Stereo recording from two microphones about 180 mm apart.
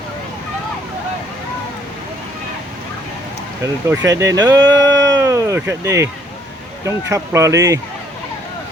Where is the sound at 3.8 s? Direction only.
15° right (ahead or behind).